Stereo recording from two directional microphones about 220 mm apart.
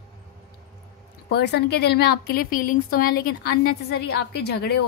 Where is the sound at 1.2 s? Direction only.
50° left (ahead or behind).